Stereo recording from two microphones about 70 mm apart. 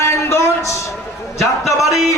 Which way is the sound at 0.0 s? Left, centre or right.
Left.